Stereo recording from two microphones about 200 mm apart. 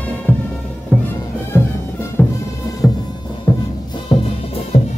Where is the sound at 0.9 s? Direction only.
10° right (ahead or behind).